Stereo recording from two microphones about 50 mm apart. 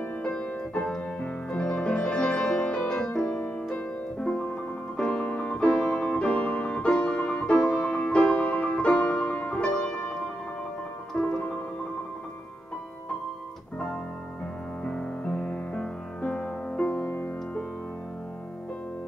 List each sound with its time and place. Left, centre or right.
0.2 s music: left
2.9 s music: centre
6.1 s music: left
7.5 s music: centre
8.2 s music: left
11.2 s music: left
14.9 s music: left